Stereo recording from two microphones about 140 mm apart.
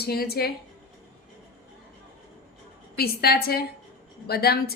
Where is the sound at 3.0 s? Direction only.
90° left.